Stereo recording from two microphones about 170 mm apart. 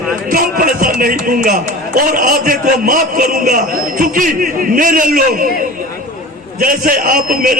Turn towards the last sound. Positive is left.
turn(degrees=-55)  # may be behind; listen again after turning